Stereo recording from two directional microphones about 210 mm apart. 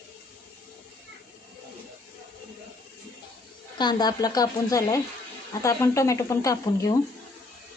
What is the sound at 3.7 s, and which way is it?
Speech, 20° left (ahead or behind).